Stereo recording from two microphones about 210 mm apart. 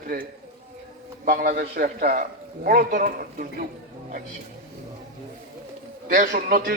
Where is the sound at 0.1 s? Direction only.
45° right (ahead or behind).